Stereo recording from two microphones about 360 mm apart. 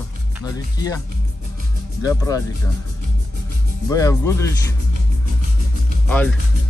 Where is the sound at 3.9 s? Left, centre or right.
Centre.